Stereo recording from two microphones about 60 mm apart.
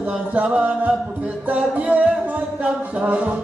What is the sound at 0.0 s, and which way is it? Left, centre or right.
Music, right.